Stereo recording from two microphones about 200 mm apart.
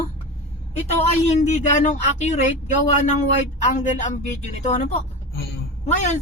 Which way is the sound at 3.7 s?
35° left (ahead or behind).